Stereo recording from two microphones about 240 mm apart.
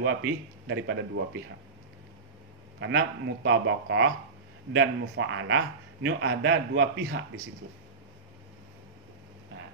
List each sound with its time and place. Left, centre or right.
0.0 s speech: right
2.8 s speech: right